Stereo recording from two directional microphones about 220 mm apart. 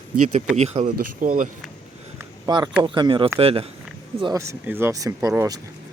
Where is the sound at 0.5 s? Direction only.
30° right (ahead or behind).